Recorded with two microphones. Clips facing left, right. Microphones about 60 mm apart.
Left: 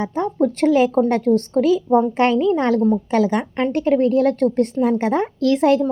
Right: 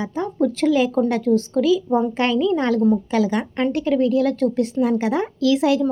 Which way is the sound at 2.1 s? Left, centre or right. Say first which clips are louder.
Left 3 dB; left.